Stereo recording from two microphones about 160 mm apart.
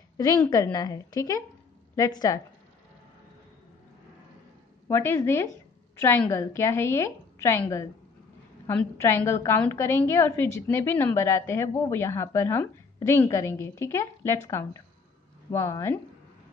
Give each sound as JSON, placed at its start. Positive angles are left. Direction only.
{"t": 0.5, "sound": "a woman's voice", "side_deg": 20}
{"t": 4.8, "sound": "a woman's voice", "side_deg": 15}